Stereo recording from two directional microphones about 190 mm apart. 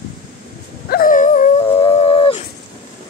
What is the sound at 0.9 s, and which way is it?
Dog, 45° left (ahead or behind).